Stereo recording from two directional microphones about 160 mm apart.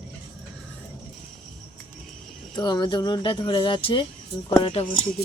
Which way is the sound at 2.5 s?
25° left (ahead or behind).